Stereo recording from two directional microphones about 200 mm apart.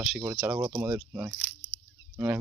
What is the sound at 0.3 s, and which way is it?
Speech, 10° right (ahead or behind).